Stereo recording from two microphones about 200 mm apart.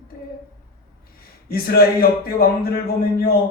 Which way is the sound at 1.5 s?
50° left (ahead or behind).